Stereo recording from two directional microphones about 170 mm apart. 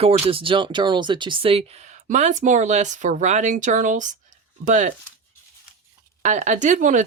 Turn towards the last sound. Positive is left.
turn(degrees=-45)  # may be behind; listen again after turning